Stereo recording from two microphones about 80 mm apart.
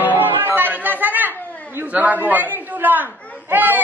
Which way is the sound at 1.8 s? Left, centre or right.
Centre.